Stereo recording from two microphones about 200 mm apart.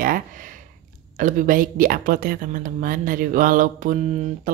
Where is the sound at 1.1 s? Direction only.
40° right (ahead or behind).